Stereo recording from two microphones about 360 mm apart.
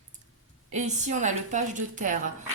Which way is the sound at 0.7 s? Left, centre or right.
Centre.